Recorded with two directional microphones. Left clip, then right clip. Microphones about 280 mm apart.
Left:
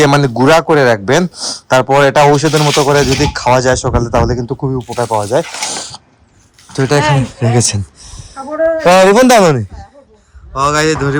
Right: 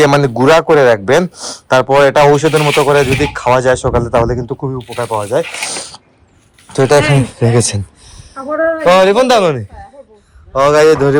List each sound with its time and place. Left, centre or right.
0.0 s speech: centre
6.7 s speech: centre
8.8 s speech: left
10.5 s a man's voice: centre